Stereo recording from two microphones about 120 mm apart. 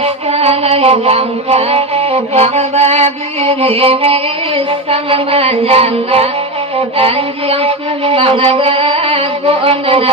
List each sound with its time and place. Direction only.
0.0 s music: 55° right (ahead or behind)